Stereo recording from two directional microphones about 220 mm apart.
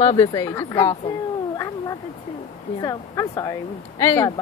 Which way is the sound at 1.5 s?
15° left (ahead or behind).